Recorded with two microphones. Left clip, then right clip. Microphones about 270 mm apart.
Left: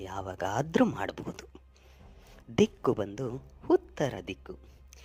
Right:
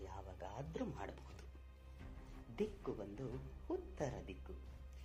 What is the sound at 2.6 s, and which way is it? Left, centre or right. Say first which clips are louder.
A man's voice: left 17 dB; left.